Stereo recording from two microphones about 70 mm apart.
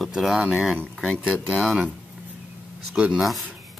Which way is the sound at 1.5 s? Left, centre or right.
Centre.